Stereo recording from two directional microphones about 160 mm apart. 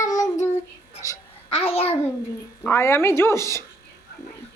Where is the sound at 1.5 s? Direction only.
40° left (ahead or behind).